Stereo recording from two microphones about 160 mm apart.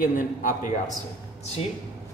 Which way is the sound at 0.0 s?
55° left (ahead or behind).